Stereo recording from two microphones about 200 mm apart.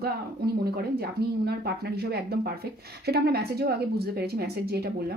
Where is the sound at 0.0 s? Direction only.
50° right (ahead or behind).